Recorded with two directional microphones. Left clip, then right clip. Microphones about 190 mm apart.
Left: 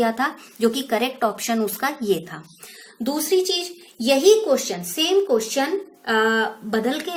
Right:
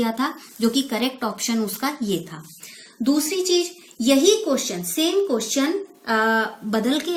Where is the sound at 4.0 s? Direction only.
20° left (ahead or behind).